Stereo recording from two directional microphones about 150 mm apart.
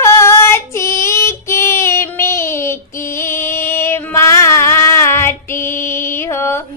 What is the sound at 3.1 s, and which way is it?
Music, 15° left (ahead or behind).